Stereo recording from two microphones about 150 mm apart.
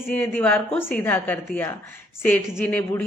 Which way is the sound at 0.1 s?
10° left (ahead or behind).